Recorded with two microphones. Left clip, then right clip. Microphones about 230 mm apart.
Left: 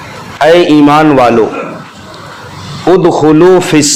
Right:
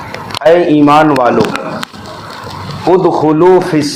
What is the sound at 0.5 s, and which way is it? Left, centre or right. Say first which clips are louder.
Speech: left 2 dB; left.